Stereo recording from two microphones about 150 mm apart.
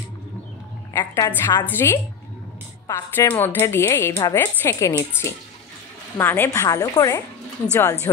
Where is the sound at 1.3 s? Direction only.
15° left (ahead or behind).